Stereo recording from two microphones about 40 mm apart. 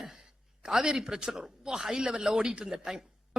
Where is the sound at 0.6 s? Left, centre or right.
Centre.